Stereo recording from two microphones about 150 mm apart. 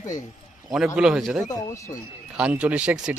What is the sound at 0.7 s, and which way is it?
Speech, 5° right (ahead or behind).